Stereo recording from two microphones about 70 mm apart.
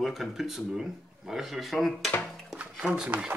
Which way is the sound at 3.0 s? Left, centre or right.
Right.